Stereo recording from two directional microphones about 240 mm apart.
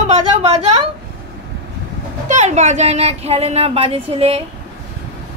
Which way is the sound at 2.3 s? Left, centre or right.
Right.